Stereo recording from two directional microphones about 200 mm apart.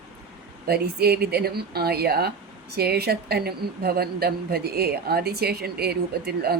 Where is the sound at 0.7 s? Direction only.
50° right (ahead or behind).